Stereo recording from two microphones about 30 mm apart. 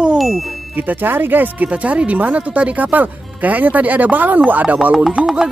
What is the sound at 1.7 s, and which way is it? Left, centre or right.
Speech, right.